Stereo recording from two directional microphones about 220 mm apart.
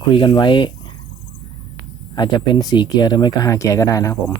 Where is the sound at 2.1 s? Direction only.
20° left (ahead or behind).